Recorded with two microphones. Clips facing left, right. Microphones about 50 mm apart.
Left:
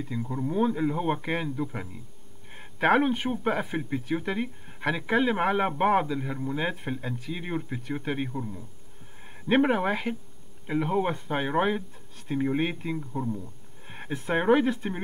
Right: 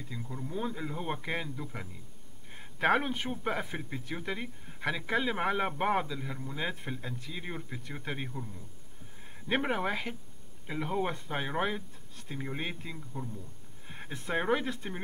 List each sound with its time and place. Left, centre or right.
0.1 s a man's voice: centre
6.0 s a man's voice: left
9.5 s a man's voice: centre
13.4 s a sound: left
14.3 s a man's voice: left